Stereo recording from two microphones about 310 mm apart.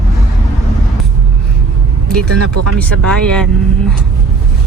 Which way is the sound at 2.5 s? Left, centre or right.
Right.